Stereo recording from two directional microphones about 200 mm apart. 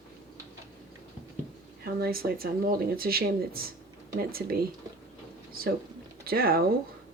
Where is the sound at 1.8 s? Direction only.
50° right (ahead or behind).